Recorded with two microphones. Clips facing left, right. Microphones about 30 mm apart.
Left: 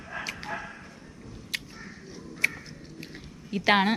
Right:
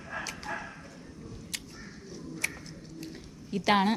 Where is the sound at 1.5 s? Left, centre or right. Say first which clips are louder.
Left 7 dB; centre.